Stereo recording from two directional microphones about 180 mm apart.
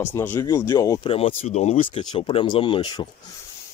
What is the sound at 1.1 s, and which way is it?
Speech, 35° left (ahead or behind).